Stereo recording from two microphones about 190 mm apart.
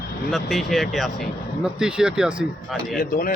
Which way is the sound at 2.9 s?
50° left (ahead or behind).